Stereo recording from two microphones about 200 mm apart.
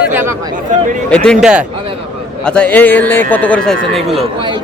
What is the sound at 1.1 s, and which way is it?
Speech, 5° left (ahead or behind).